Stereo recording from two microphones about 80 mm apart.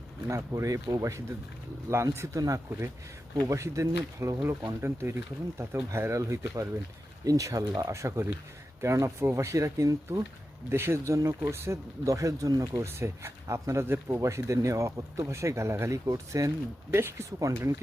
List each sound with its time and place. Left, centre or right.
0.3 s speech: right
2.1 s speech: right
13.0 s speech: right